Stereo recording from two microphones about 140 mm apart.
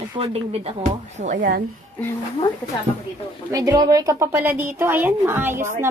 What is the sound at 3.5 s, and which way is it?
A woman's voice, 25° right (ahead or behind).